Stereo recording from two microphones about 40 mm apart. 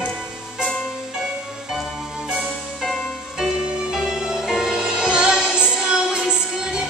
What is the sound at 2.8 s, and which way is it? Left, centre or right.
Music, centre.